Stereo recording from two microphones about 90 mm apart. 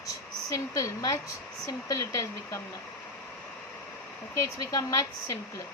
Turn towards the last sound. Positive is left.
turn(degrees=35)  # may be behind; listen again after turning